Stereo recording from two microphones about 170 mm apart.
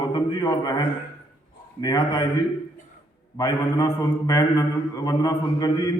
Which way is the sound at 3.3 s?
20° left (ahead or behind).